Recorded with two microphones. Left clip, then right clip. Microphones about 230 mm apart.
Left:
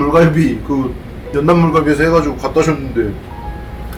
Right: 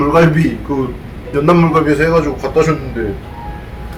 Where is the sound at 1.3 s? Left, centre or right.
Centre.